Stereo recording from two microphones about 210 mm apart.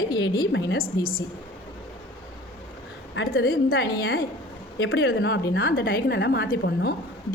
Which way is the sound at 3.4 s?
45° left (ahead or behind).